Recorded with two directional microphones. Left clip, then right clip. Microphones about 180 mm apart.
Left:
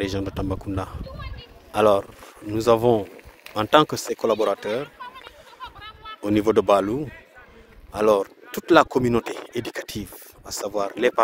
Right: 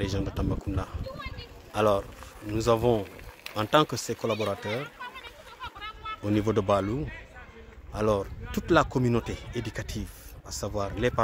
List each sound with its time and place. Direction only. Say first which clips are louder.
0.0 s a man's voice: left 5 dB; 40° left (ahead or behind)
5.6 s a sound: even; 20° right (ahead or behind)
6.2 s speech: left 8 dB; 50° left (ahead or behind)